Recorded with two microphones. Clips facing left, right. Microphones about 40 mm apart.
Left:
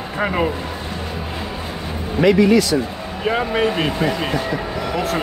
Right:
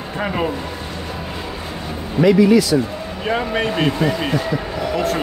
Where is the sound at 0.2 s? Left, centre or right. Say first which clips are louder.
Left 2 dB; centre.